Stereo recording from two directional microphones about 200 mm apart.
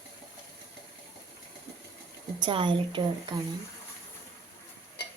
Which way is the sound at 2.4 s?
25° right (ahead or behind).